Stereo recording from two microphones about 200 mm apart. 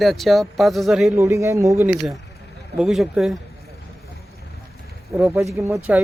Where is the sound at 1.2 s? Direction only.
15° right (ahead or behind).